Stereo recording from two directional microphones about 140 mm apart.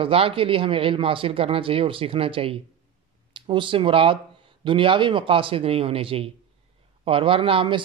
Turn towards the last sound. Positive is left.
turn(degrees=-35)  # may be behind; listen again after turning